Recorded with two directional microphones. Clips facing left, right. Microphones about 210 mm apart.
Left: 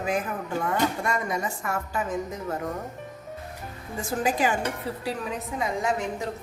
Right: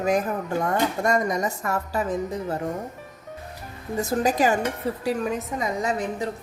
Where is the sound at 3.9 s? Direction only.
40° right (ahead or behind).